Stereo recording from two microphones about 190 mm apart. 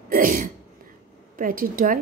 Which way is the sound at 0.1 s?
50° right (ahead or behind).